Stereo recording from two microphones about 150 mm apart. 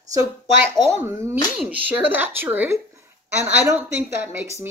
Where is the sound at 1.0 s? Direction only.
15° right (ahead or behind).